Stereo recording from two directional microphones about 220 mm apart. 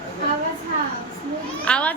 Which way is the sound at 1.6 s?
5° left (ahead or behind).